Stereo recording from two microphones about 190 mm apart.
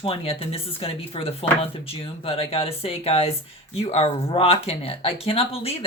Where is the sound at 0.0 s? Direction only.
30° left (ahead or behind).